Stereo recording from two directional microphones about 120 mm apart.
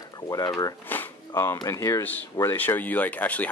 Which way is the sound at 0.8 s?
15° left (ahead or behind).